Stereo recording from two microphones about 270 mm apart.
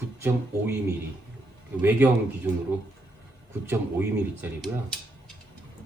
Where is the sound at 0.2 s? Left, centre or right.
Centre.